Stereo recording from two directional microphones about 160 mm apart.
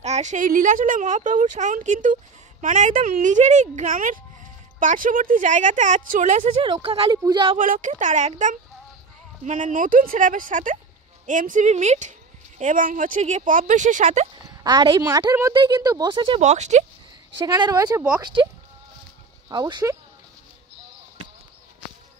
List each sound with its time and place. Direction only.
0.0 s speech: 45° right (ahead or behind)
6.6 s speech: 35° right (ahead or behind)
7.5 s speech: 55° right (ahead or behind)
14.3 s speech: 25° right (ahead or behind)
16.3 s speech: 45° right (ahead or behind)
17.4 s speech: 25° right (ahead or behind)
19.5 s speech: 25° right (ahead or behind)